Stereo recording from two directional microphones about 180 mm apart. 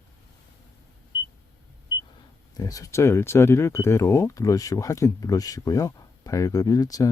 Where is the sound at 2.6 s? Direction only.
20° left (ahead or behind).